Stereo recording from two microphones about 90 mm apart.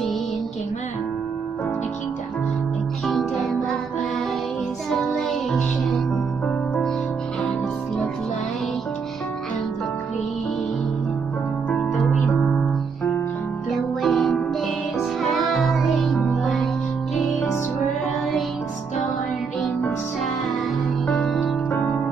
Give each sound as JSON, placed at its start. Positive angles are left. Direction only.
{"t": 3.1, "sound": "music", "side_deg": 0}
{"t": 4.9, "sound": "music", "side_deg": 0}
{"t": 12.0, "sound": "music", "side_deg": 0}
{"t": 13.7, "sound": "music", "side_deg": 0}
{"t": 21.1, "sound": "music", "side_deg": 5}
{"t": 21.6, "sound": "music", "side_deg": 20}